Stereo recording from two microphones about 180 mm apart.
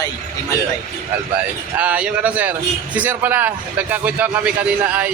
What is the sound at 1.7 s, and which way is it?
A man's voice, 5° right (ahead or behind).